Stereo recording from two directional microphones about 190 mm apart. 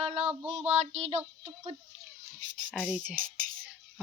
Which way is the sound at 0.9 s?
35° right (ahead or behind).